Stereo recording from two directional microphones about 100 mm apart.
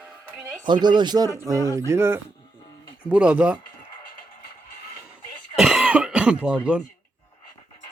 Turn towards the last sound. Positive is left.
turn(degrees=-10)  # may be behind; listen again after turning